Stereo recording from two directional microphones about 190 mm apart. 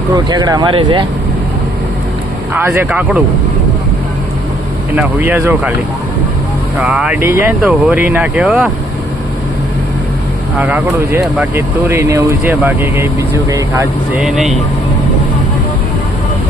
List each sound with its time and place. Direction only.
0.1 s speech: 20° right (ahead or behind)
2.5 s speech: 10° right (ahead or behind)
4.9 s speech: 10° right (ahead or behind)
6.7 s speech: 5° right (ahead or behind)
10.6 s speech: 10° right (ahead or behind)
14.2 s speech: centre (ahead or behind)